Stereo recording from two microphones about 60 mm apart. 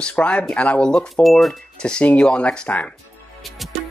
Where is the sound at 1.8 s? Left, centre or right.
Centre.